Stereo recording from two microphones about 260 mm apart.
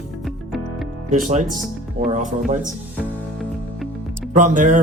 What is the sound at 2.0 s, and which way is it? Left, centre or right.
Speech, right.